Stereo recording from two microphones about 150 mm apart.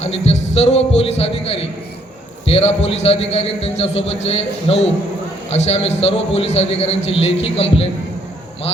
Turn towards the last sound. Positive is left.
turn(degrees=40)  # may be behind; listen again after turning